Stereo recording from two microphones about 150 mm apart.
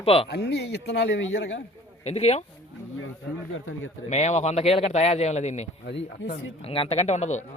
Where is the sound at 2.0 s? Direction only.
45° left (ahead or behind).